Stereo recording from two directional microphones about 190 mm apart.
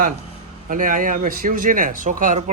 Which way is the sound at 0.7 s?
45° right (ahead or behind).